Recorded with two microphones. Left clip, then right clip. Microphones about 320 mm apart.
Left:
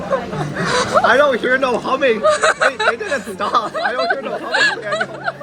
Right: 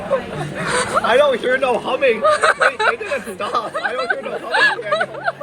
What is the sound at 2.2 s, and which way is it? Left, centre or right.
Speech, centre.